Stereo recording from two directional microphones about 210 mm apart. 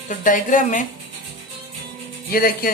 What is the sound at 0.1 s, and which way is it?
Speech, 40° left (ahead or behind).